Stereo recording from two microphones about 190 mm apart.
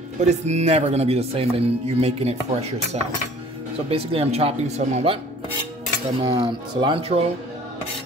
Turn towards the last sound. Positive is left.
turn(degrees=-30)  # may be behind; listen again after turning